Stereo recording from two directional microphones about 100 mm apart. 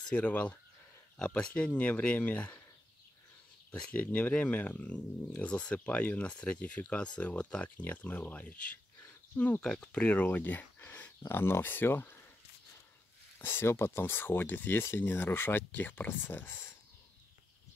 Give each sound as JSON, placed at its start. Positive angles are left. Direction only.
{"t": 0.1, "sound": "speech", "side_deg": 15}
{"t": 3.7, "sound": "speech", "side_deg": 15}
{"t": 13.4, "sound": "speech", "side_deg": 20}